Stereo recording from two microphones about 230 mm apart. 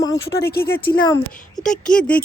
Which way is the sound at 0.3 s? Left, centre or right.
Left.